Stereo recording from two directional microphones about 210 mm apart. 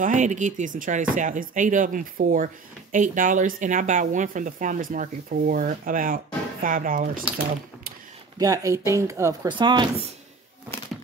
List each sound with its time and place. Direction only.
0.0 s speech: 35° right (ahead or behind)
8.4 s speech: 15° right (ahead or behind)